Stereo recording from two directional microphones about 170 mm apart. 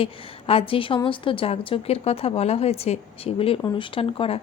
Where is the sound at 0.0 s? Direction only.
35° left (ahead or behind).